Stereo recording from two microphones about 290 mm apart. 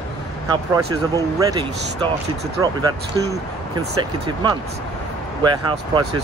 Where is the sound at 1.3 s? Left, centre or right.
Centre.